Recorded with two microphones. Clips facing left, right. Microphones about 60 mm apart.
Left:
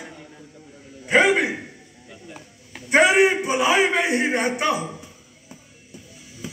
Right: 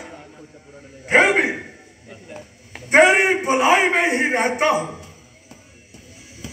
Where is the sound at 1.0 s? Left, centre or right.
Right.